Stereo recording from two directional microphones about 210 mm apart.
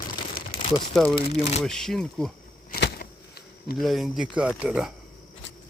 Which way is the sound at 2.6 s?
45° left (ahead or behind).